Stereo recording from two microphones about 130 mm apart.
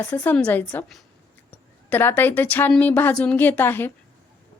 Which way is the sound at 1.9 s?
15° left (ahead or behind).